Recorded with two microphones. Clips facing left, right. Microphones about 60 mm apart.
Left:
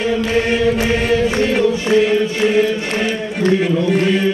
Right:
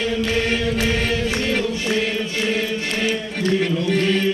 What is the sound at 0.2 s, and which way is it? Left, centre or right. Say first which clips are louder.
Chant: left 5 dB; centre.